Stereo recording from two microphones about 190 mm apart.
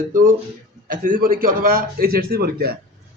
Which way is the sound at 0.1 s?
45° right (ahead or behind).